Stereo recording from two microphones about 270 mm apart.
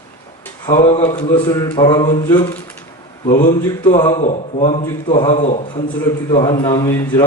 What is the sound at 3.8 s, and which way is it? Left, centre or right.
A man's voice, centre.